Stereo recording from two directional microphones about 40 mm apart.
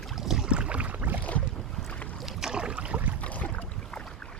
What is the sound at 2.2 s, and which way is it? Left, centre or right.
Boat, centre.